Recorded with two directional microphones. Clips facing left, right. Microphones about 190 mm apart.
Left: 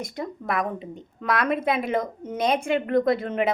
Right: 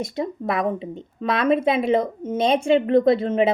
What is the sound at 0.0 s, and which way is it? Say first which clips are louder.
A woman's voice: right 6 dB; 25° right (ahead or behind).